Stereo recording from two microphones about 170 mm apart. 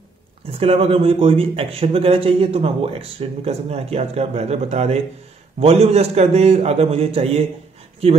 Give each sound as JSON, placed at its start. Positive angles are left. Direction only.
{"t": 0.5, "sound": "a man's voice", "side_deg": -35}